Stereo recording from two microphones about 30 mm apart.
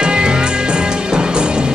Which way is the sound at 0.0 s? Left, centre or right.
Right.